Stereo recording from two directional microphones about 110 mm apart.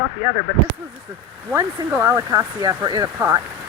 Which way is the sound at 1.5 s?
25° right (ahead or behind).